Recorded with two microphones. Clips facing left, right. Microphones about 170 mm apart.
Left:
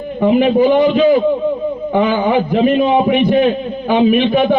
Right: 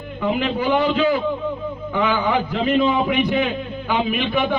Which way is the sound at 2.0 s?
40° left (ahead or behind).